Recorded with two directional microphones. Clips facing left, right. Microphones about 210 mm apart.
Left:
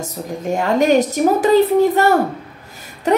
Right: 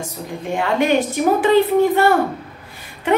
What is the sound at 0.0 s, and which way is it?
A woman's voice, 40° left (ahead or behind).